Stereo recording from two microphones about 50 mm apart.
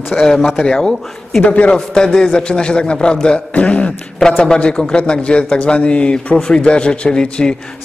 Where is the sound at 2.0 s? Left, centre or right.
Centre.